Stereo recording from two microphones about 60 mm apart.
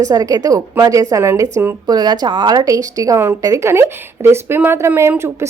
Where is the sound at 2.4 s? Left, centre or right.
Right.